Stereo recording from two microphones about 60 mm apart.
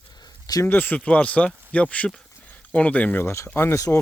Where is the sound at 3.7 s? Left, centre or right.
Left.